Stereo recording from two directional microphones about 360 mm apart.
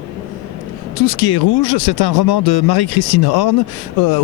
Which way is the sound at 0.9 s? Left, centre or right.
Left.